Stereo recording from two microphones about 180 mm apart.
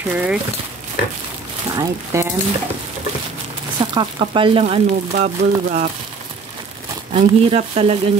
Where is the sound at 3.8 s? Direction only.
25° right (ahead or behind).